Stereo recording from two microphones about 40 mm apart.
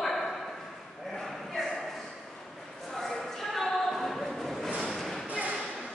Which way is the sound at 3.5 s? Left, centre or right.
Centre.